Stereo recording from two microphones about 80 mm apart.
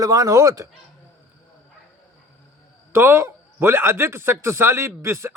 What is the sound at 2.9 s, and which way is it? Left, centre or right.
A man's voice, right.